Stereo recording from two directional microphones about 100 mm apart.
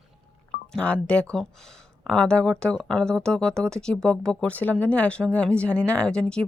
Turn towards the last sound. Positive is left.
turn(degrees=10)  # may be behind; listen again after turning